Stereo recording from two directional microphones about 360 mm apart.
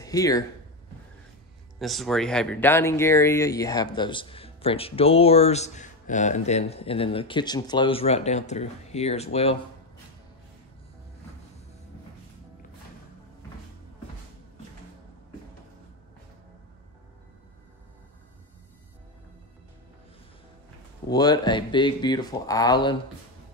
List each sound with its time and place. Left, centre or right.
0.0 s speech: centre
1.8 s speech: centre
21.1 s speech: centre